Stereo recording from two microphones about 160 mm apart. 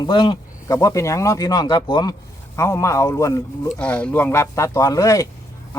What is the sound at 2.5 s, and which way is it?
Speech, 15° left (ahead or behind).